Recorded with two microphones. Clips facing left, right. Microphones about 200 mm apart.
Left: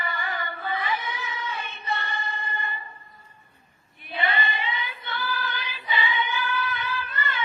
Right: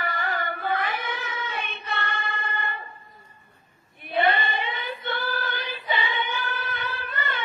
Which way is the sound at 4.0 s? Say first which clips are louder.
Right 5 dB; 55° right (ahead or behind).